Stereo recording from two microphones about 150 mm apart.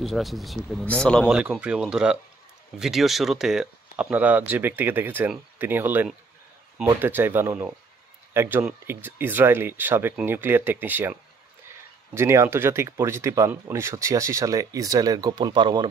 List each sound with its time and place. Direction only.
0.0 s speech: centre (ahead or behind)
1.3 s speech: 5° right (ahead or behind); by 15.9 s 30° right (ahead or behind)